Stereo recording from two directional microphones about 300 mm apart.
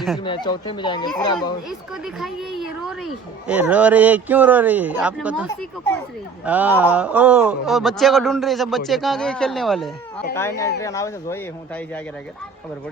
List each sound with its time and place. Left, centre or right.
0.2 s speech: centre
2.1 s a man's voice: centre
6.4 s a man's voice: centre